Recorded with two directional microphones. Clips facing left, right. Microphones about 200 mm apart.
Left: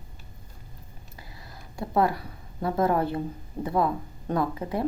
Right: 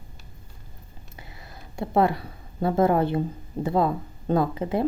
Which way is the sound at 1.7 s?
25° right (ahead or behind).